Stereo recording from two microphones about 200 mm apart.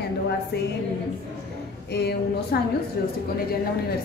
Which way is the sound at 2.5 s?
50° left (ahead or behind).